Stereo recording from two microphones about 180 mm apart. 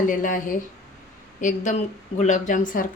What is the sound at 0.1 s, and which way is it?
A woman's voice, 50° left (ahead or behind).